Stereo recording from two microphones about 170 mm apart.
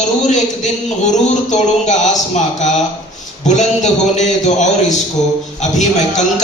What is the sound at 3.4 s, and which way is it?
A man's voice, 45° left (ahead or behind).